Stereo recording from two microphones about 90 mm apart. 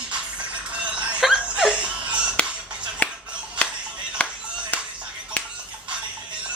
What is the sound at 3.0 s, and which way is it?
Music, 15° left (ahead or behind).